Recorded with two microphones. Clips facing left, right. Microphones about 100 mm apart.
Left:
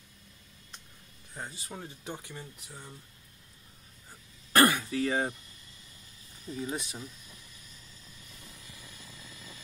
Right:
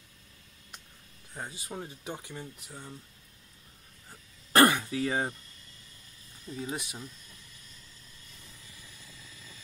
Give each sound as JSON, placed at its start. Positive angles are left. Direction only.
{"t": 1.3, "sound": "speech", "side_deg": -10}
{"t": 4.5, "sound": "throat clearing", "side_deg": -25}
{"t": 6.7, "sound": "speech", "side_deg": -10}
{"t": 8.5, "sound": "vehicle", "side_deg": 20}